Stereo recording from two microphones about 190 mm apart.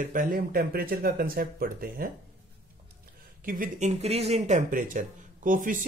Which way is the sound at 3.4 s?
45° right (ahead or behind).